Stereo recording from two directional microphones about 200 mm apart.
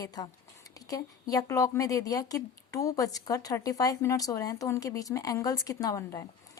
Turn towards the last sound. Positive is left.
turn(degrees=15)  # may be behind; listen again after turning